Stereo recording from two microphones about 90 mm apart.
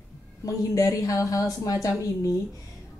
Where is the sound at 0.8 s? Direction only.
40° left (ahead or behind).